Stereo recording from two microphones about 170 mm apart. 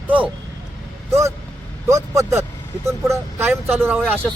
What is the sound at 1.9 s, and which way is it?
Speech, 15° right (ahead or behind).